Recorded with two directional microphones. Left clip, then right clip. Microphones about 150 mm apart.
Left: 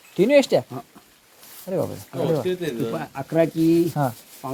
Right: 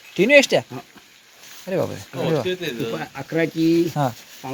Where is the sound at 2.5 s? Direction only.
90° left.